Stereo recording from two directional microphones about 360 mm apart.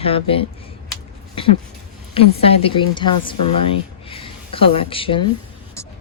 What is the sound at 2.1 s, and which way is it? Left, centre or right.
A woman's voice, centre.